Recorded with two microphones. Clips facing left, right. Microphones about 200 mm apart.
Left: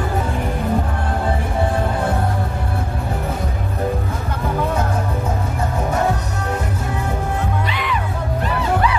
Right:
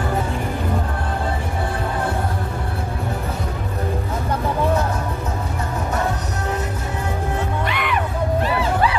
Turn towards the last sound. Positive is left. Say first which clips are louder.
# even
turn(degrees=-60)  # may be behind; listen again after turning